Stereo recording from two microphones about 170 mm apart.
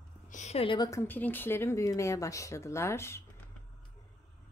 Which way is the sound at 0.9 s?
15° left (ahead or behind).